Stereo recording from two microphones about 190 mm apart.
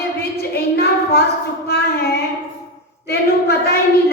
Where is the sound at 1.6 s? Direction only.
55° left (ahead or behind).